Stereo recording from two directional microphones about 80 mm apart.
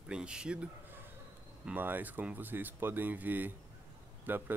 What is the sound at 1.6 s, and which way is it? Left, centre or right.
Speech, right.